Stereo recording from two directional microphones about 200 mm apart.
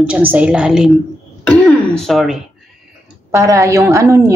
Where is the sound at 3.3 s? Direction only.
15° right (ahead or behind).